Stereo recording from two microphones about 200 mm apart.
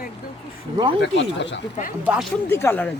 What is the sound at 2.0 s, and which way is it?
Speech, 5° right (ahead or behind).